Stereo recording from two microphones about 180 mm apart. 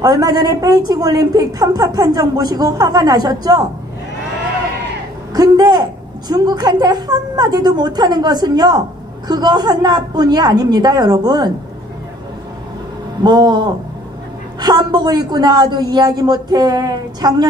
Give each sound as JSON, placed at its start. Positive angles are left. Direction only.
{"t": 0.0, "sound": "a woman's voice", "side_deg": -20}
{"t": 5.3, "sound": "a woman's voice", "side_deg": -20}
{"t": 13.2, "sound": "a woman's voice", "side_deg": -25}